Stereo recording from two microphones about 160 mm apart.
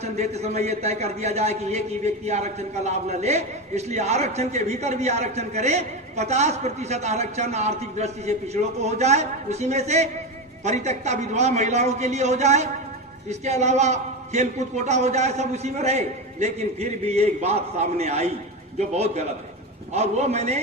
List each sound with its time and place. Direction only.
0.0 s a man's voice: 40° right (ahead or behind)